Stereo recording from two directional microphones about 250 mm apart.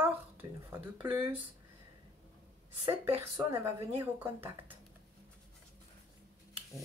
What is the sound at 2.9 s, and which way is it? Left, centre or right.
Speech, centre.